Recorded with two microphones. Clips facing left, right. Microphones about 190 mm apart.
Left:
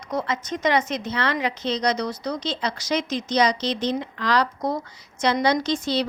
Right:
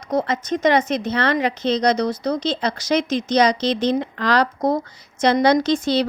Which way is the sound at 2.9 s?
75° right (ahead or behind).